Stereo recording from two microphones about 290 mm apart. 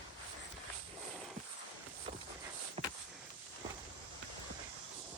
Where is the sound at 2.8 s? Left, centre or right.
Right.